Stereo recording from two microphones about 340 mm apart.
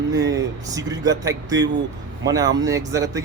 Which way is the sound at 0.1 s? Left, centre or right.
Right.